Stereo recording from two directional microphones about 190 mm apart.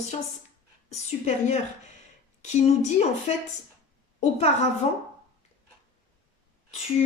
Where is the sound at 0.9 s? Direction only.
35° left (ahead or behind).